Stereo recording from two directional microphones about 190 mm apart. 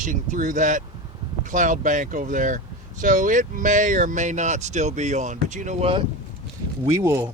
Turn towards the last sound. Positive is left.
turn(degrees=-15)  # may be behind; listen again after turning